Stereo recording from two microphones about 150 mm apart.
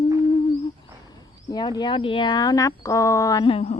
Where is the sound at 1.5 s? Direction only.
25° left (ahead or behind).